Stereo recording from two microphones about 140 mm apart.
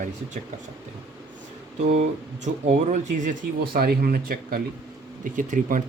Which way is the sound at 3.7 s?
90° right.